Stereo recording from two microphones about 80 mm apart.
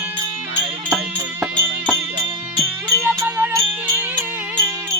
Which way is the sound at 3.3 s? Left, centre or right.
Right.